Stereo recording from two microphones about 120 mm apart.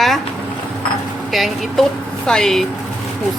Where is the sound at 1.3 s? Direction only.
Centre (ahead or behind).